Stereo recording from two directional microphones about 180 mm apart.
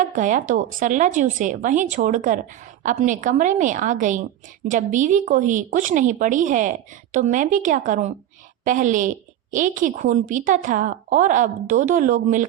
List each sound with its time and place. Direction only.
0.0 s a woman's voice: 45° right (ahead or behind)